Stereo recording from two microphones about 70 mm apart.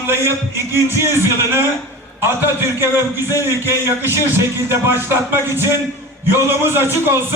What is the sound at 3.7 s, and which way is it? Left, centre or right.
A man's voice, right.